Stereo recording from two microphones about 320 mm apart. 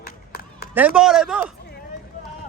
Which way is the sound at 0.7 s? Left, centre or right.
Centre.